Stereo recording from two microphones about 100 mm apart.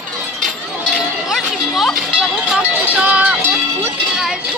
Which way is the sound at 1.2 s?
Centre (ahead or behind).